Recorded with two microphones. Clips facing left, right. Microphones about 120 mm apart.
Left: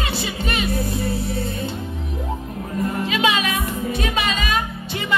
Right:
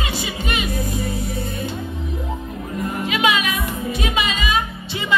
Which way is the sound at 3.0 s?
30° left (ahead or behind).